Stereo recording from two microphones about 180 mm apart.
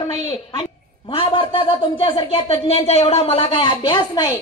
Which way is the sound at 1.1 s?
30° left (ahead or behind).